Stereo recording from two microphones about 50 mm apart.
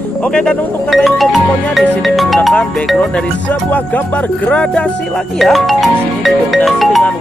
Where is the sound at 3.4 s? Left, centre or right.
Left.